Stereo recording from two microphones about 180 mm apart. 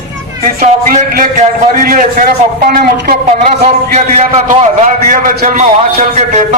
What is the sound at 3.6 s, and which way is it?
A man's voice, 40° right (ahead or behind).